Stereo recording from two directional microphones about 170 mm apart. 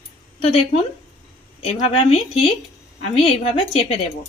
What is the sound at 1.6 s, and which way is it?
A woman's voice, 35° left (ahead or behind).